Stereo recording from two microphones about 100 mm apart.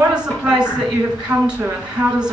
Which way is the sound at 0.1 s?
10° right (ahead or behind).